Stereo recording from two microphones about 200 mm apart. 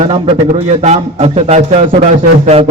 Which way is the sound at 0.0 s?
30° right (ahead or behind).